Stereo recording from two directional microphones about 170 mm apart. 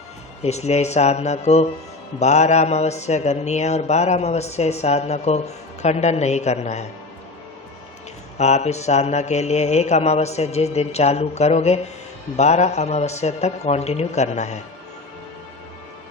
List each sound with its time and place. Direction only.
0.4 s a man's voice: 40° left (ahead or behind)
8.4 s a man's voice: 40° left (ahead or behind)